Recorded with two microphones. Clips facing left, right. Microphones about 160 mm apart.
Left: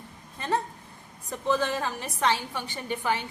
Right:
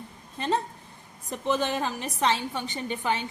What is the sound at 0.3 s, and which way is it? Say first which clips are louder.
A woman's voice: right 1 dB; 20° right (ahead or behind).